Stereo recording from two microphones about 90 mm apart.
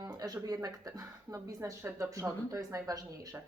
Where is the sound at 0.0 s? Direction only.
45° right (ahead or behind).